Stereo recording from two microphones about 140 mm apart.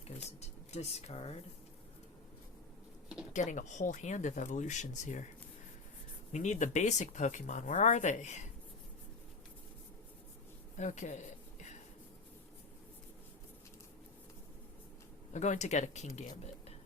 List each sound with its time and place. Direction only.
0.2 s speech: 50° left (ahead or behind)
3.3 s speech: 60° left (ahead or behind)
6.3 s speech: 60° left (ahead or behind)
10.8 s speech: 60° left (ahead or behind)
15.3 s speech: 55° left (ahead or behind)